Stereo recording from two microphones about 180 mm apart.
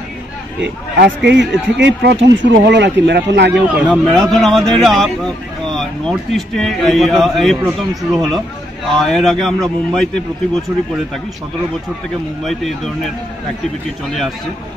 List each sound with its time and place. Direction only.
0.9 s speech: 75° right (ahead or behind)
3.9 s speech: centre (ahead or behind)
12.4 s speech: centre (ahead or behind)